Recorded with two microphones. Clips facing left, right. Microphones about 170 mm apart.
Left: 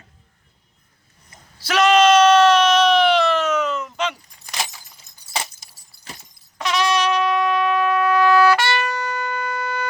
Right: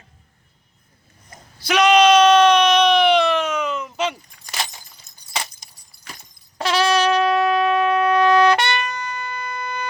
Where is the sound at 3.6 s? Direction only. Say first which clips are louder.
Left 1 dB; 15° right (ahead or behind).